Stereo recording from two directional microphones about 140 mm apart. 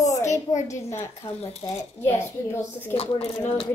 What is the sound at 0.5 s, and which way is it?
Speech, 60° left (ahead or behind).